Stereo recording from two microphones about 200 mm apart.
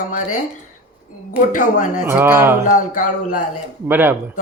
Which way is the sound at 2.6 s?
40° left (ahead or behind).